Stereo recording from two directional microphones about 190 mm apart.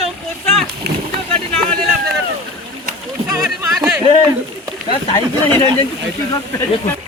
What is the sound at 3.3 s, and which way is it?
Speech, 15° right (ahead or behind).